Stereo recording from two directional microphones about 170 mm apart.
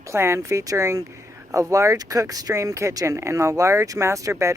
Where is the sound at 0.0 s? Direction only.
15° right (ahead or behind).